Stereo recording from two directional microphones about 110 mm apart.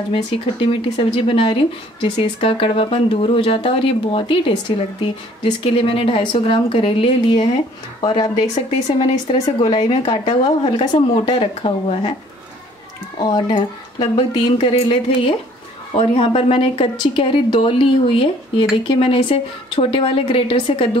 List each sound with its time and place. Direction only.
0.1 s speech: 55° left (ahead or behind)
8.0 s speech: 45° left (ahead or behind); by 12.1 s 60° left (ahead or behind)
13.2 s speech: 40° left (ahead or behind)